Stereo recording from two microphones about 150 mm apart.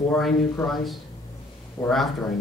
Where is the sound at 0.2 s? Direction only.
Centre (ahead or behind).